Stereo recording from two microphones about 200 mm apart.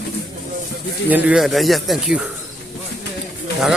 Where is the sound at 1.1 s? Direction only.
5° right (ahead or behind).